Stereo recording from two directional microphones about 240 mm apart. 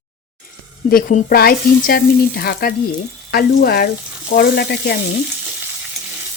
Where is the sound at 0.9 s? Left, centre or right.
Left.